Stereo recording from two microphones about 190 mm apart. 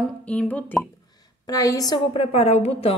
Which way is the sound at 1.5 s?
20° left (ahead or behind).